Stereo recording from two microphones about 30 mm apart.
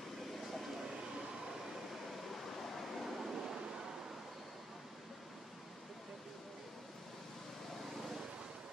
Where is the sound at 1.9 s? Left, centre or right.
Centre.